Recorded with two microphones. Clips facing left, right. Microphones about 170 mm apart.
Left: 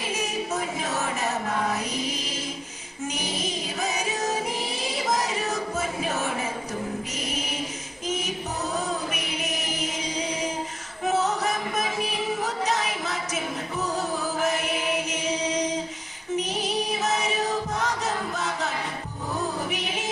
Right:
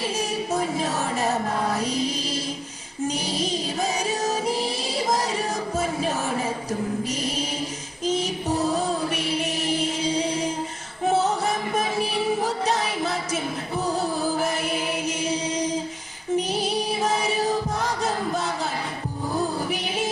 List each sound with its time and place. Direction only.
0.2 s music: 35° right (ahead or behind)
8.0 s chant: 35° right (ahead or behind)
11.0 s music: 30° right (ahead or behind)